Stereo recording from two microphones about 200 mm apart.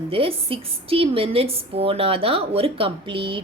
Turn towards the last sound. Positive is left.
turn(degrees=-25)  # may be behind; listen again after turning